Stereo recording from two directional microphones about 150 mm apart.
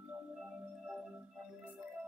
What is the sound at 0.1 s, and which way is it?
Music, 5° right (ahead or behind).